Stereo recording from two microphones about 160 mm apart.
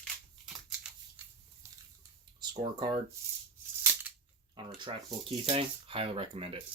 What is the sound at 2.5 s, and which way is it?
Speech, 30° right (ahead or behind).